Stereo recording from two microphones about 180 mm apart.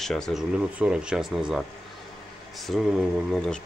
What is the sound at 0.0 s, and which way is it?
Speech, centre (ahead or behind).